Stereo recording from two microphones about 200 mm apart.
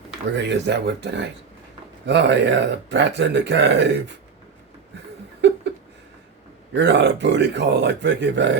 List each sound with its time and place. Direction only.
0.3 s speech: 60° right (ahead or behind)
6.7 s speech: 60° right (ahead or behind)